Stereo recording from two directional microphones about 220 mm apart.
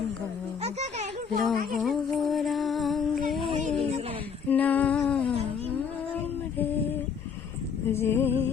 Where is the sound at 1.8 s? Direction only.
Centre (ahead or behind).